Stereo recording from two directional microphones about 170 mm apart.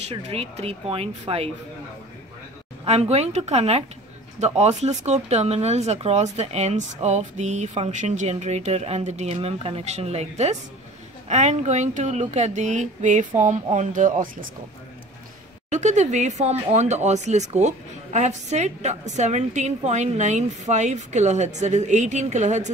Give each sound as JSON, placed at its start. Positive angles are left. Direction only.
{"t": 0.1, "sound": "speech", "side_deg": -35}
{"t": 2.8, "sound": "speech", "side_deg": -40}
{"t": 15.7, "sound": "speech", "side_deg": -45}